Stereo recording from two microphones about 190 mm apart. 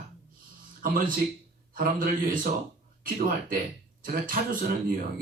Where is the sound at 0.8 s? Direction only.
45° right (ahead or behind).